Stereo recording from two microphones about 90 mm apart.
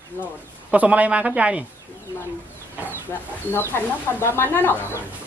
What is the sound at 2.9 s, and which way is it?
Speech, 25° left (ahead or behind).